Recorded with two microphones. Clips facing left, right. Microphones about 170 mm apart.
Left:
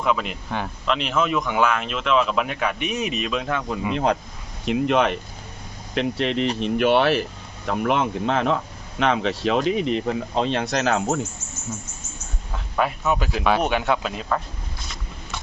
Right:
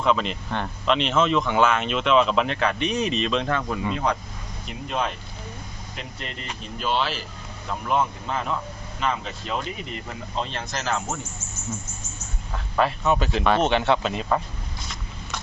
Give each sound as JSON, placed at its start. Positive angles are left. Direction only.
{"t": 0.0, "sound": "speech", "side_deg": 5}
{"t": 4.6, "sound": "speech", "side_deg": 80}
{"t": 7.7, "sound": "speech", "side_deg": 75}
{"t": 12.7, "sound": "speech", "side_deg": 5}